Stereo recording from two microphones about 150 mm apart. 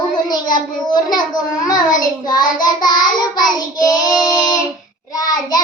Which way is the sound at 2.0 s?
25° left (ahead or behind).